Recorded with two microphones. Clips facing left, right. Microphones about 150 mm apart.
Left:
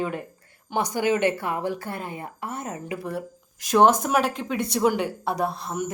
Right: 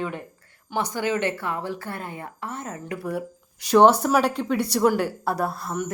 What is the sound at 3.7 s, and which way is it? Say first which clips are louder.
A woman's voice: right 2 dB; 10° left (ahead or behind).